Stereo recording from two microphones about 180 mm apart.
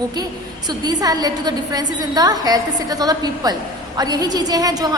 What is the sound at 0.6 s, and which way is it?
A woman's voice, 20° right (ahead or behind).